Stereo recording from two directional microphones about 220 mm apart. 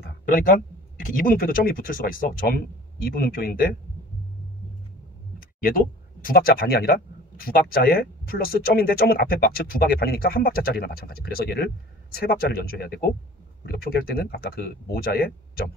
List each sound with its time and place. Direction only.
0.0 s speech: 40° left (ahead or behind)
5.6 s speech: 40° left (ahead or behind)